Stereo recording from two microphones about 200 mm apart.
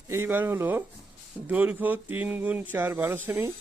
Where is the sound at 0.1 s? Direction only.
10° right (ahead or behind).